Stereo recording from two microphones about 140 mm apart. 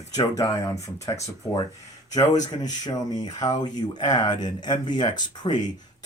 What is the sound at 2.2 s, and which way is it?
Speech, 35° left (ahead or behind).